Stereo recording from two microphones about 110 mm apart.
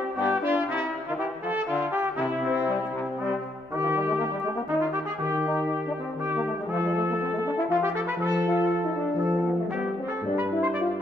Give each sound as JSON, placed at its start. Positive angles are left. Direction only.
{"t": 7.7, "sound": "brass instrument", "side_deg": -20}